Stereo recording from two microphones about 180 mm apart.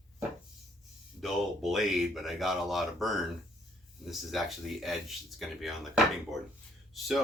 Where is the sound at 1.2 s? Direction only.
Centre (ahead or behind).